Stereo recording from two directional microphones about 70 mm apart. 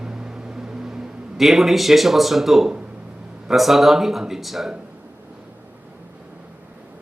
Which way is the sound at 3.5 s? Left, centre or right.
Centre.